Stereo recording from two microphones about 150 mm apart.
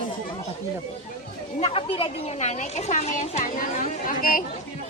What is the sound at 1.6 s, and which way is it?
Speech, 35° left (ahead or behind).